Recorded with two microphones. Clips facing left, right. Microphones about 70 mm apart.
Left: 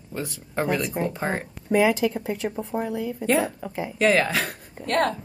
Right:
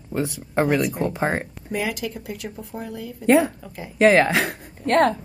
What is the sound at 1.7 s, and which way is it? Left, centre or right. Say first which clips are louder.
Speech: left 8 dB; left.